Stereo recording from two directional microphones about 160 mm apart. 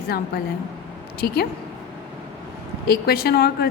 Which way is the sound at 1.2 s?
75° left (ahead or behind).